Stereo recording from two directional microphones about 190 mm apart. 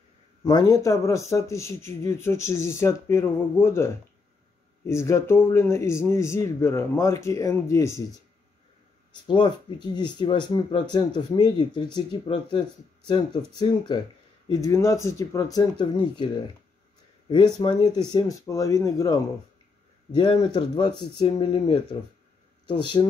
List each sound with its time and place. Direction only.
0.4 s a man's voice: 20° left (ahead or behind)
9.3 s a man's voice: 25° left (ahead or behind)